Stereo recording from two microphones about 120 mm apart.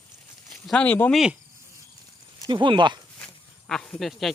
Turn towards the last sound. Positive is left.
turn(degrees=5)  # may be behind; listen again after turning